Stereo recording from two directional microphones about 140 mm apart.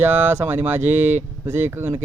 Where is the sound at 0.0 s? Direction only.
15° right (ahead or behind).